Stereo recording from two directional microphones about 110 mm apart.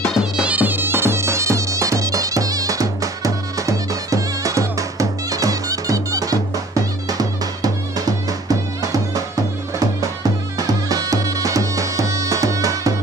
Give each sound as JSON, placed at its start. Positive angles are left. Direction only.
{"t": 0.4, "sound": "music", "side_deg": -15}